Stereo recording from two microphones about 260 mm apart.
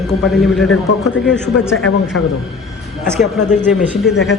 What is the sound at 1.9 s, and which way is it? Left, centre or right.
Speech, left.